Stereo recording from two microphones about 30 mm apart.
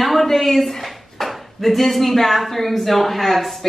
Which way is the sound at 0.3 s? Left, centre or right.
Centre.